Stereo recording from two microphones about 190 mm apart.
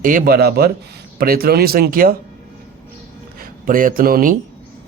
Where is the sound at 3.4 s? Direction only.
50° right (ahead or behind).